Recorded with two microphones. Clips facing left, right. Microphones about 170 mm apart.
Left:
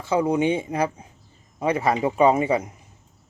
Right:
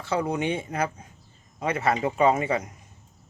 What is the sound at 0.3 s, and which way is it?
Speech, 10° left (ahead or behind).